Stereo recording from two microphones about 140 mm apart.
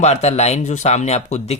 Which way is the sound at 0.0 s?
50° left (ahead or behind).